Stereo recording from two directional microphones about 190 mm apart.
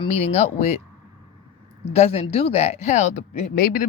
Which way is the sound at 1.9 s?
35° left (ahead or behind).